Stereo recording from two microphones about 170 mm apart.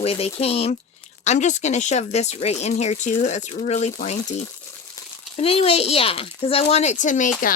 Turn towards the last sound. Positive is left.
turn(degrees=50)  # may be behind; listen again after turning